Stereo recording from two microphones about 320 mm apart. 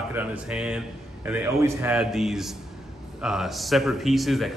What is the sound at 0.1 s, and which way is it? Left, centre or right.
A man's voice, centre.